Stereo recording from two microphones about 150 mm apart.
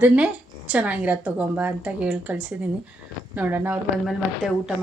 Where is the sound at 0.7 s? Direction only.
10° right (ahead or behind).